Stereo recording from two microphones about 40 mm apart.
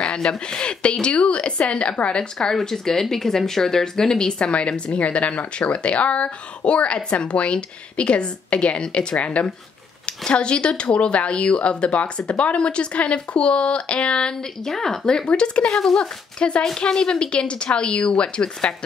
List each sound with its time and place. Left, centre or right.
0.0 s speech: left
2.4 s speech: centre
14.6 s speech: centre
15.8 s speech: centre
16.3 s speech: left